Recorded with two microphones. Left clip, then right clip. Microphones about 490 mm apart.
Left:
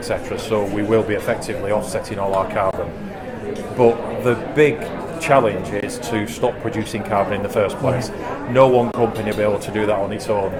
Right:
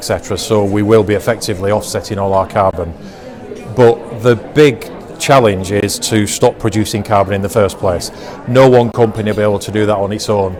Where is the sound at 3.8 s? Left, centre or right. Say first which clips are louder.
Right 6 dB; right.